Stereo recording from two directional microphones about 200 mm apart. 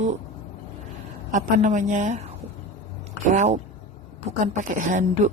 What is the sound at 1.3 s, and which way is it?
Speech, 40° right (ahead or behind).